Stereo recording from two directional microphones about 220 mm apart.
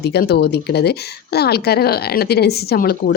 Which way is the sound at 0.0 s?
50° left (ahead or behind).